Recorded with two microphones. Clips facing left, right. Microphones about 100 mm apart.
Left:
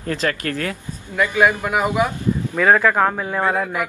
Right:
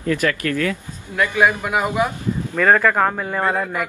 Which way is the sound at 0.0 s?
35° left (ahead or behind).